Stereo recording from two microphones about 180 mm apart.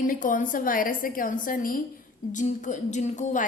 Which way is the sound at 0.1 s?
50° left (ahead or behind).